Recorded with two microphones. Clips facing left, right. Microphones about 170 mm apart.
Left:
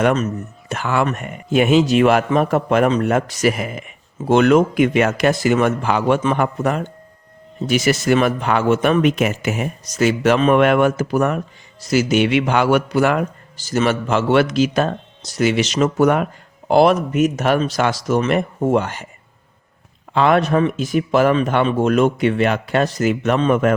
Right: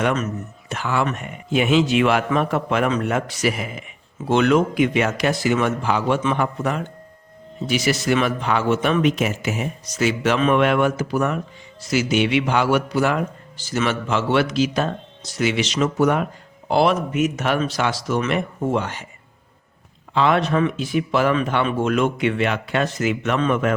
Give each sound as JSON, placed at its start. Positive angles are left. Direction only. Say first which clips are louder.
{"t": 0.0, "sound": "speech", "louder": "left 4 dB", "side_deg": 35}
{"t": 0.7, "sound": "a man's voice", "louder": "left 3 dB", "side_deg": 55}
{"t": 13.6, "sound": "a man's voice", "louder": "left 4 dB", "side_deg": 40}
{"t": 20.1, "sound": "a man's voice", "louder": "left 3 dB", "side_deg": 50}